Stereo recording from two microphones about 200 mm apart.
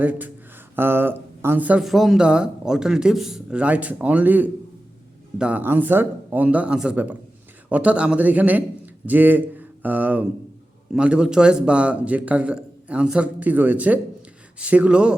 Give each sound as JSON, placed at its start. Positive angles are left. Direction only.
{"t": 0.0, "sound": "a man's voice", "side_deg": -10}